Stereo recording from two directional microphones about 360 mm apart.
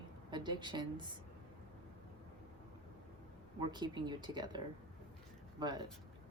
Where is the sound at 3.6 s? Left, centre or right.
Centre.